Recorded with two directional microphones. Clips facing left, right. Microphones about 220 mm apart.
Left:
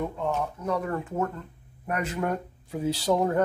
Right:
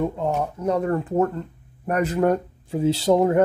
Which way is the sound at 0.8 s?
35° right (ahead or behind).